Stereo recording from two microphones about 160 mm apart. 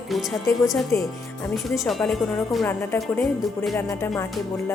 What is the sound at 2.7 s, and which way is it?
Speech, 15° left (ahead or behind).